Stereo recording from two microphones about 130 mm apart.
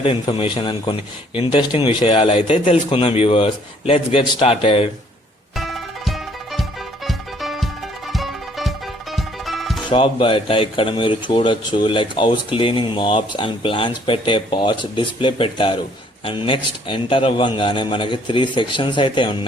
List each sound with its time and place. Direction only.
0.0 s a man's voice: 45° left (ahead or behind)
5.5 s music: centre (ahead or behind)
9.9 s speech: 45° left (ahead or behind)